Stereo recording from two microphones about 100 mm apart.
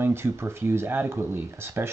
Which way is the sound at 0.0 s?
25° right (ahead or behind).